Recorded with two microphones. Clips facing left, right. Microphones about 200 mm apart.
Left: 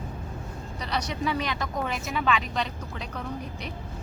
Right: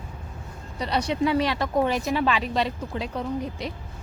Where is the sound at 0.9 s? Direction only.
30° right (ahead or behind).